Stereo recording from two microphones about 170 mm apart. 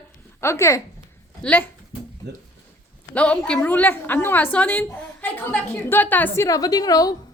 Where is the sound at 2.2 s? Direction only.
80° right.